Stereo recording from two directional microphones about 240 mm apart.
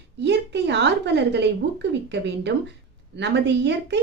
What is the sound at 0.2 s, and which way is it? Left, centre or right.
Speech, right.